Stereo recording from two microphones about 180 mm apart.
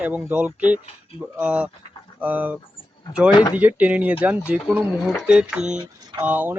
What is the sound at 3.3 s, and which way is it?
Speech, 25° left (ahead or behind).